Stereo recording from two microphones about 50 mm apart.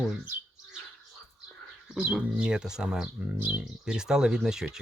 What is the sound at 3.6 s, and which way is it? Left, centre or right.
Speech, centre.